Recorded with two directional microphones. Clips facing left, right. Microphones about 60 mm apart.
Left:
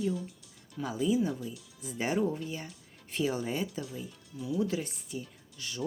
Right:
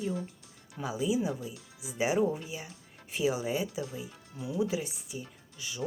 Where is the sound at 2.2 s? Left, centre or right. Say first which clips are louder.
Right 2 dB; centre.